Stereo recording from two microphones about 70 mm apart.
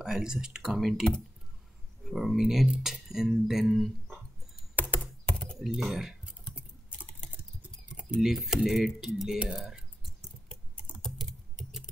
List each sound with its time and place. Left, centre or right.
0.0 s speech: centre
2.0 s speech: centre
4.7 s computer keyboard: left
5.0 s typing: centre
5.6 s speech: centre
7.6 s typing: centre
8.2 s speech: centre
10.5 s typing: centre